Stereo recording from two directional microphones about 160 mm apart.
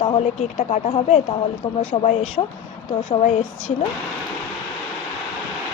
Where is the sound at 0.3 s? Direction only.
40° left (ahead or behind).